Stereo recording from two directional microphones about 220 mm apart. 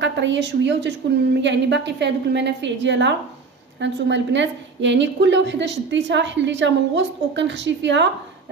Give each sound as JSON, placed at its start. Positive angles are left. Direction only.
{"t": 0.0, "sound": "a woman's voice", "side_deg": -55}